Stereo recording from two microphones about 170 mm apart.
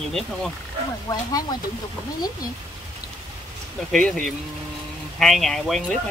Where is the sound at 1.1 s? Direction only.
25° left (ahead or behind).